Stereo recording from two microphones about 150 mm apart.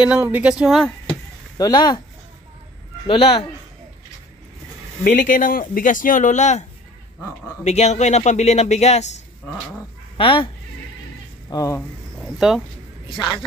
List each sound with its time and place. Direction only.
0.2 s speech: 10° right (ahead or behind)
1.6 s speech: 30° left (ahead or behind)
3.1 s speech: 40° left (ahead or behind)
5.0 s speech: 60° left (ahead or behind)
7.6 s a man's voice: 50° left (ahead or behind)
10.1 s speech: 35° left (ahead or behind)
11.5 s speech: 20° left (ahead or behind)
12.2 s speech: 5° right (ahead or behind)